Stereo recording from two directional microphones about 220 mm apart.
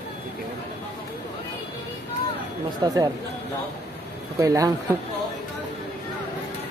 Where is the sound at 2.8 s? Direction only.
15° right (ahead or behind).